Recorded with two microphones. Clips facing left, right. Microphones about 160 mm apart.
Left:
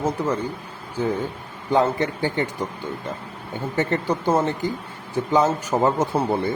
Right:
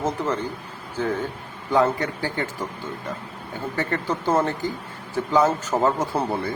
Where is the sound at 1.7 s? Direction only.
25° left (ahead or behind).